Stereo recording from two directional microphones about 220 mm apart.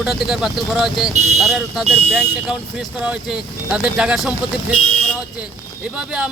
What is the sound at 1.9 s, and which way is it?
Speech, 30° right (ahead or behind).